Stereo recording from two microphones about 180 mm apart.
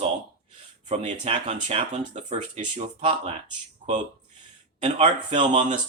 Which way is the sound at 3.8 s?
45° right (ahead or behind).